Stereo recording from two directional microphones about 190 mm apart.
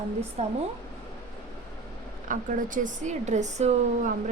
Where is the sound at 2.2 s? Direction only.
45° right (ahead or behind).